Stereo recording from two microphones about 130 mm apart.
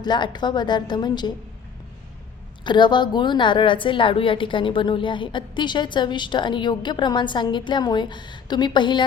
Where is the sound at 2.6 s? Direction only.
35° left (ahead or behind).